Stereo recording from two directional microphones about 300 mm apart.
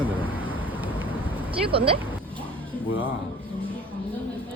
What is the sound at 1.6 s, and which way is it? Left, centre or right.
Speech, centre.